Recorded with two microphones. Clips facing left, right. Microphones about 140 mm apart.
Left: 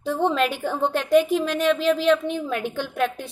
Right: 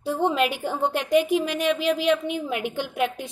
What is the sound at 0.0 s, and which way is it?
A woman's voice, 15° right (ahead or behind).